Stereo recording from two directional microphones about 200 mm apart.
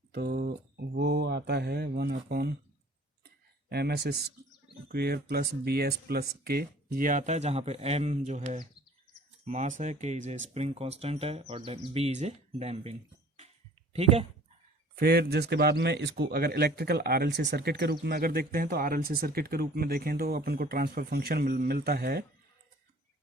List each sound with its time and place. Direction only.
0.1 s mantra: 50° right (ahead or behind)
3.7 s speech: 55° right (ahead or behind); by 14.3 s 30° right (ahead or behind)
14.9 s speech: 50° right (ahead or behind)